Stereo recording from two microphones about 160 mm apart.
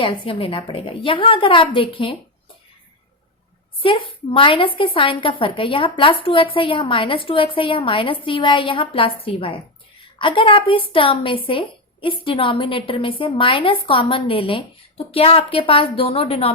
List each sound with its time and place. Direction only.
0.0 s a woman's voice: 35° left (ahead or behind)
3.8 s a woman's voice: 35° left (ahead or behind)